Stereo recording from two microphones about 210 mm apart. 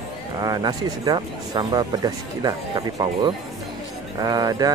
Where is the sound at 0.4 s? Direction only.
20° right (ahead or behind).